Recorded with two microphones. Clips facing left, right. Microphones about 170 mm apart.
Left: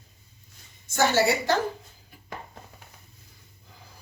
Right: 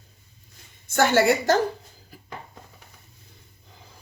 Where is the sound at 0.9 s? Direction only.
50° right (ahead or behind).